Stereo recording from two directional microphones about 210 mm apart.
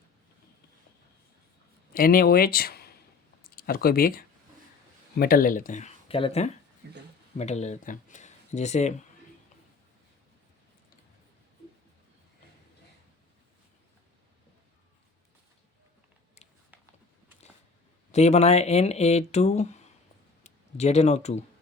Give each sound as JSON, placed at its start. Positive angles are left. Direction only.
{"t": 1.9, "sound": "speech", "side_deg": 45}
{"t": 6.8, "sound": "speech", "side_deg": -50}
{"t": 7.3, "sound": "speech", "side_deg": 30}
{"t": 16.7, "sound": "a sound", "side_deg": -10}
{"t": 18.1, "sound": "speech", "side_deg": 30}